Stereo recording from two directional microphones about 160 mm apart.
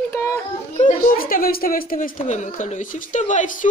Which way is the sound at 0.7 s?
55° left (ahead or behind).